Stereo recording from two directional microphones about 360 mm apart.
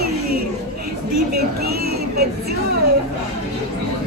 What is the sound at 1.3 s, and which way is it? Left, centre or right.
Speech, right.